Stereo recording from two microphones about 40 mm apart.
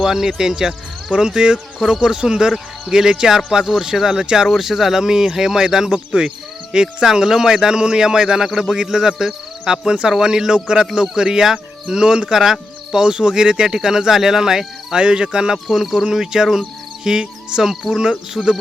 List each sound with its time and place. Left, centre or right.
0.0 s speech: centre
14.9 s speech: right
15.7 s speech: centre
16.0 s speech: centre
18.4 s speech: centre